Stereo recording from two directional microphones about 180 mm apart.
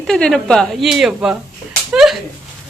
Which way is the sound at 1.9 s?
Centre (ahead or behind).